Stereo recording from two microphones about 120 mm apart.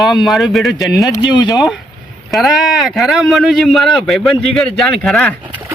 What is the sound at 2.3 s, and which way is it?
Speech, centre (ahead or behind).